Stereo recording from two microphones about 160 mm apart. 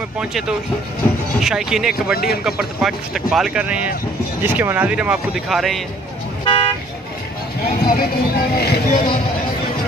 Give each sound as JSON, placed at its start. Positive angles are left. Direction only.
{"t": 0.2, "sound": "speech", "side_deg": -5}
{"t": 6.4, "sound": "speech", "side_deg": 30}
{"t": 7.9, "sound": "speech", "side_deg": 75}